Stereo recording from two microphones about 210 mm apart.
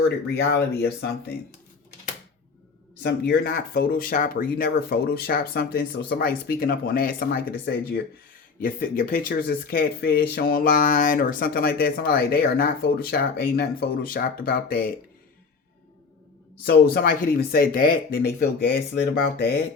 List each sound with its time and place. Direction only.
0.3 s speech: 50° left (ahead or behind)
3.0 s speech: 50° left (ahead or behind)
16.6 s speech: 45° left (ahead or behind)